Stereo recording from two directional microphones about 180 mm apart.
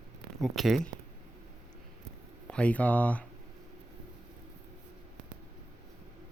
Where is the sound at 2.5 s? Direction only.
5° left (ahead or behind).